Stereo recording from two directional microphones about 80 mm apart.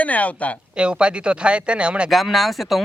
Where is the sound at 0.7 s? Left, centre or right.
Centre.